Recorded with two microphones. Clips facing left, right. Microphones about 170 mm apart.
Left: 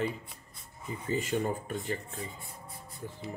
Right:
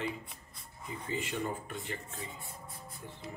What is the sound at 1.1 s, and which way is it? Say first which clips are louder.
Speech: left 5 dB; 40° left (ahead or behind).